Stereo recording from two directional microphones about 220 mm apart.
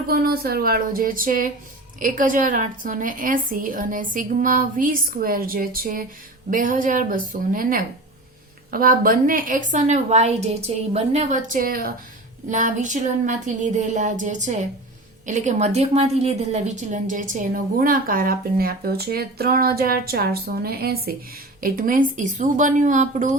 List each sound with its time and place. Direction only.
0.1 s a woman's voice: 45° right (ahead or behind)